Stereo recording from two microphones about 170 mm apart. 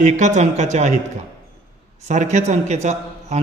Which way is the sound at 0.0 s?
45° right (ahead or behind).